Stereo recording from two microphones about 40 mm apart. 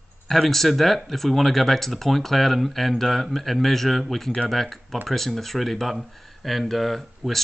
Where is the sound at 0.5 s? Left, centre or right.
Centre.